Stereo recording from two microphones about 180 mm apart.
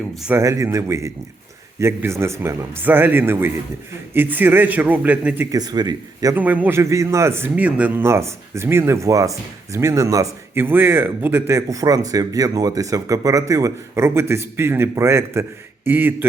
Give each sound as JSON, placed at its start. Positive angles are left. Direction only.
{"t": 0.2, "sound": "a man's voice", "side_deg": -5}
{"t": 0.4, "sound": "a man's voice", "side_deg": -15}
{"t": 6.3, "sound": "a man's voice", "side_deg": -10}